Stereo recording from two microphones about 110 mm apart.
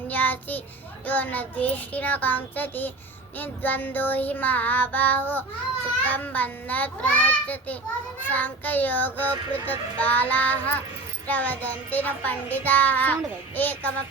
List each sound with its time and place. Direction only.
0.1 s child singing: 15° left (ahead or behind)